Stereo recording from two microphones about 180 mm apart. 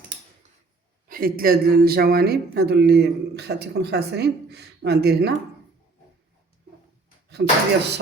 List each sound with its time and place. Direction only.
1.0 s speech: 50° right (ahead or behind)
7.4 s speech: 70° right (ahead or behind)